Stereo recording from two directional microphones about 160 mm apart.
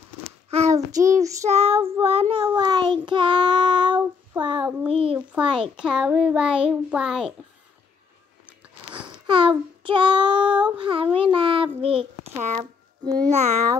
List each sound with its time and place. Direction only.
0.5 s child singing: 40° right (ahead or behind)
0.7 s child singing: 20° right (ahead or behind)
1.1 s child singing: 45° right (ahead or behind); by 3.9 s 30° right (ahead or behind)
3.9 s child singing: 10° right (ahead or behind)
4.4 s child singing: 30° right (ahead or behind)
4.8 s a child's voice: 35° right (ahead or behind)
5.8 s a child's voice: 5° right (ahead or behind)
9.0 s child singing: 30° right (ahead or behind)
10.8 s a child's voice: 35° right (ahead or behind)
13.0 s child singing: 25° right (ahead or behind)
13.3 s child singing: 45° right (ahead or behind)